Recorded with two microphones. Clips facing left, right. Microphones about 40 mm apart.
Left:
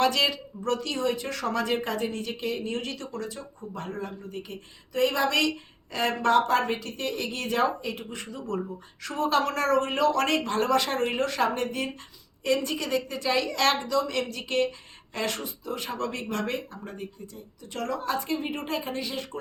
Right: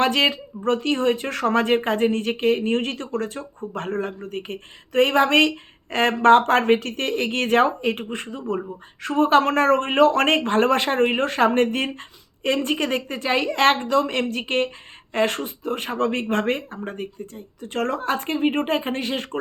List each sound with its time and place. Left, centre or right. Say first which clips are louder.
0.0 s speech: right 4 dB; right